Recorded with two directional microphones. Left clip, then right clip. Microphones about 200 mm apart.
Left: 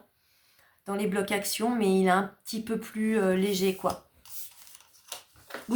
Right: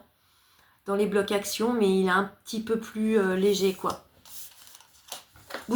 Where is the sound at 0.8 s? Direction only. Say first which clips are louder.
Right 4 dB; 45° left (ahead or behind).